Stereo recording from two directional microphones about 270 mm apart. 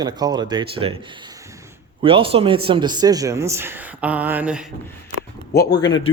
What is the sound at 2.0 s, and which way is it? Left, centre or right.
A man's voice, centre.